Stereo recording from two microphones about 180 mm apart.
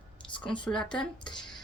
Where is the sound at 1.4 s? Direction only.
5° left (ahead or behind).